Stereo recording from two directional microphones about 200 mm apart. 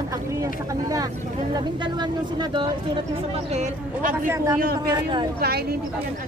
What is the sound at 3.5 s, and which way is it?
Speech, 35° right (ahead or behind).